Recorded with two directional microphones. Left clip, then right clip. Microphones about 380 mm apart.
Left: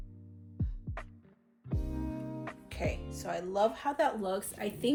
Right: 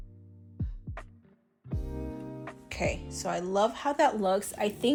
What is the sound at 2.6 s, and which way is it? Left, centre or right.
Speech, centre.